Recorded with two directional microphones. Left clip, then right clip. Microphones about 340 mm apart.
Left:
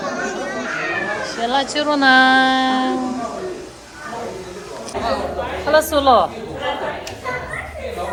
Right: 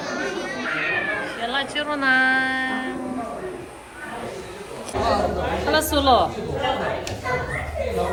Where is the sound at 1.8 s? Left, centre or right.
Left.